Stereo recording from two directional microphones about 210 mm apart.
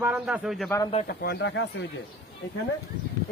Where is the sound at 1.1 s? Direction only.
50° left (ahead or behind).